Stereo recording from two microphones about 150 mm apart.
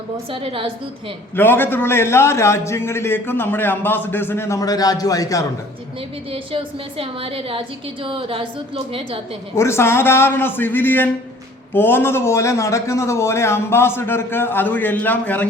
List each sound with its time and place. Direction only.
0.3 s a woman's voice: 35° right (ahead or behind)
1.4 s a man's voice: 15° left (ahead or behind)
6.3 s a woman's voice: 35° right (ahead or behind)
9.6 s a man's voice: 15° left (ahead or behind)